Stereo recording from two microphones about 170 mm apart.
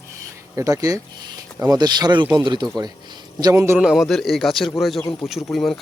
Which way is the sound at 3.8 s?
5° right (ahead or behind).